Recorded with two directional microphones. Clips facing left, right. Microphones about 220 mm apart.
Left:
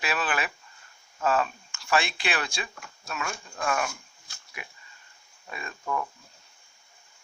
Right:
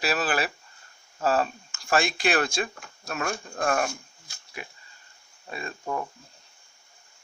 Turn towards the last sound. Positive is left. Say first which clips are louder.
# right 1 dB
turn(degrees=-30)  # may be behind; listen again after turning